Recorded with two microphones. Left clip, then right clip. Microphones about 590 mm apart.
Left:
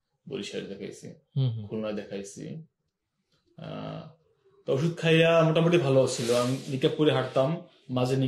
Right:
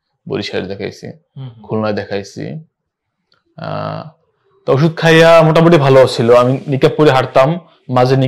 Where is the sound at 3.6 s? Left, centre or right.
Right.